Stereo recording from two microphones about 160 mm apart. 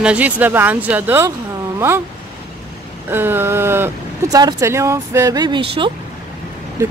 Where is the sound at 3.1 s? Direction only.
15° right (ahead or behind); by 5.9 s 35° right (ahead or behind).